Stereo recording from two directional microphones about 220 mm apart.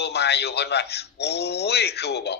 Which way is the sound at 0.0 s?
50° left (ahead or behind).